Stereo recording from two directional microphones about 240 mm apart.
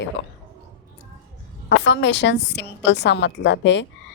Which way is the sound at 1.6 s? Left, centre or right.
Left.